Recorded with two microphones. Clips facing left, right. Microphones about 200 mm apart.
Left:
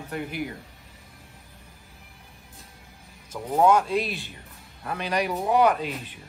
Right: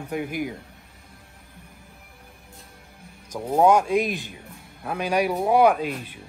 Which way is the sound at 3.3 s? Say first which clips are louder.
Right 2 dB; 10° right (ahead or behind).